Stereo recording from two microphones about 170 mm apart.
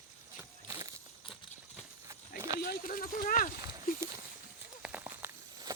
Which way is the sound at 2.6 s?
55° left (ahead or behind).